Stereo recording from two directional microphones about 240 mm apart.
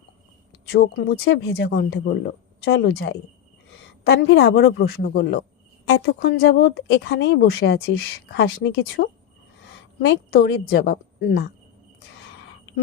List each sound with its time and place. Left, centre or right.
0.7 s a woman's voice: left
10.1 s speech: left